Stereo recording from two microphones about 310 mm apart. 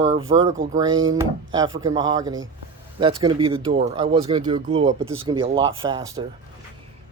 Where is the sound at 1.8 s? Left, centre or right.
Centre.